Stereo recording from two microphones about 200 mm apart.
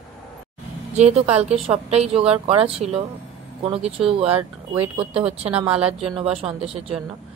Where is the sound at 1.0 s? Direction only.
30° right (ahead or behind).